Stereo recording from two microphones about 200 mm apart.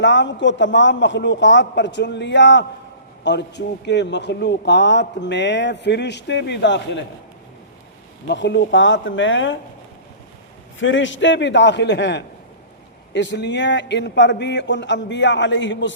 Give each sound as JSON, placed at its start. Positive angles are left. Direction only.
{"t": 0.0, "sound": "a man's voice", "side_deg": 65}
{"t": 8.3, "sound": "speech", "side_deg": 60}
{"t": 10.8, "sound": "a man's voice", "side_deg": 70}